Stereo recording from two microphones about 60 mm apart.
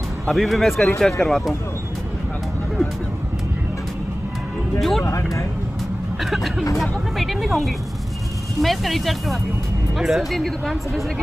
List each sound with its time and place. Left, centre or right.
0.3 s speech: centre
4.7 s speech: centre
5.0 s speech: left
6.8 s speech: centre